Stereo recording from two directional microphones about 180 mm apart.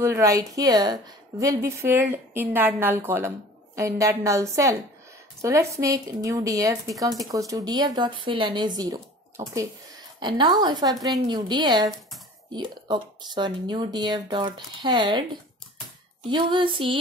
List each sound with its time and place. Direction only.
0.0 s a woman's voice: 15° right (ahead or behind)
16.3 s speech: 25° right (ahead or behind)